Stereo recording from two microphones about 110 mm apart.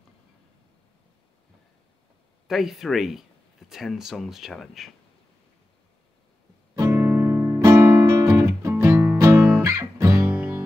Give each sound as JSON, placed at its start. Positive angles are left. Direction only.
{"t": 2.4, "sound": "speech", "side_deg": 0}
{"t": 6.8, "sound": "music", "side_deg": -25}